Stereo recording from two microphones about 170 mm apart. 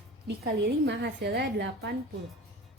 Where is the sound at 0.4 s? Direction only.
85° right.